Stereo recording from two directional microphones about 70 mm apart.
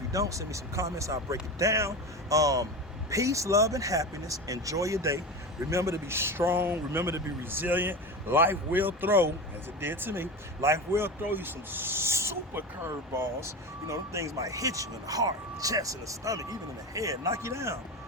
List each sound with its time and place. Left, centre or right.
0.1 s a man's voice: right